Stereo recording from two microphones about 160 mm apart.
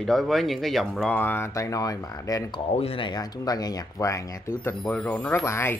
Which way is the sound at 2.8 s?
35° left (ahead or behind).